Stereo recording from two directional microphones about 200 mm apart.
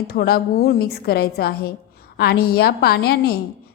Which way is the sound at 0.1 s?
50° left (ahead or behind).